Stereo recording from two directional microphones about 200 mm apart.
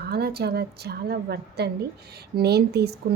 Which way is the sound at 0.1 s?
50° right (ahead or behind).